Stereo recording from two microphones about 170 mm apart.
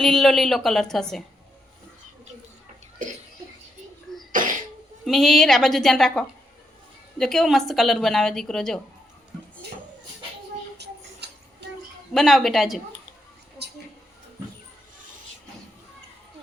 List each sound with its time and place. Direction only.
0.0 s a woman's voice: centre (ahead or behind)
4.3 s cough: 50° right (ahead or behind)
5.0 s a woman's voice: centre (ahead or behind)
11.2 s a sound: 80° right
12.1 s a woman's voice: centre (ahead or behind)